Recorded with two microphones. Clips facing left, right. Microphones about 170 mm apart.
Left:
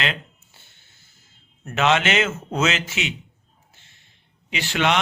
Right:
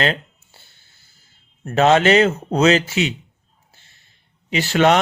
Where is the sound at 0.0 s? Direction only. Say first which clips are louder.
Right 7 dB; 35° right (ahead or behind).